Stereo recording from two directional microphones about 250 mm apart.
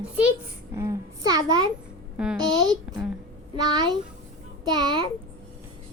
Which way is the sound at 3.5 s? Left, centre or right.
Centre.